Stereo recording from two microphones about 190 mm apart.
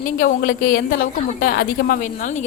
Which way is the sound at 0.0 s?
45° left (ahead or behind).